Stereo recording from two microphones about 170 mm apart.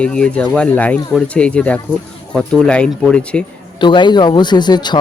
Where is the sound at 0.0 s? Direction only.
5° left (ahead or behind).